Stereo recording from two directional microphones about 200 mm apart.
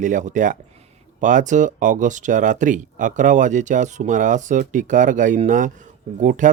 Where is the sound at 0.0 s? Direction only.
40° right (ahead or behind).